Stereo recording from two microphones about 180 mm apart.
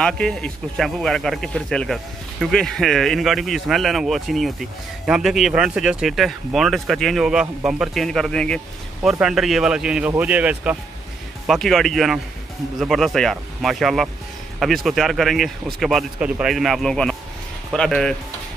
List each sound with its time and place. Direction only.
0.0 s speech: 5° left (ahead or behind)